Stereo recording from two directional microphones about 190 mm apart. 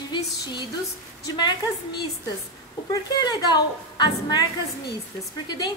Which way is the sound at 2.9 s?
20° left (ahead or behind).